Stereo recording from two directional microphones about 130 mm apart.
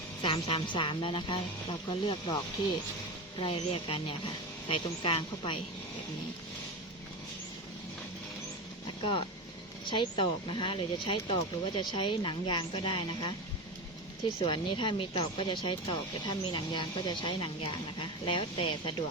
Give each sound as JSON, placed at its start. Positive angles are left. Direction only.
{"t": 0.2, "sound": "speech", "side_deg": 40}
{"t": 3.4, "sound": "speech", "side_deg": 45}
{"t": 9.8, "sound": "speech", "side_deg": 40}
{"t": 14.3, "sound": "speech", "side_deg": 40}